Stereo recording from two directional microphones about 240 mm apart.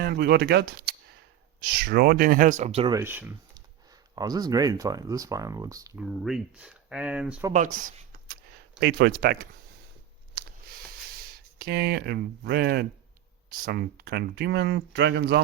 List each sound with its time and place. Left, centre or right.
0.0 s speech: right
3.0 s speech: centre
6.1 s speech: centre
7.5 s speech: right
11.3 s speech: right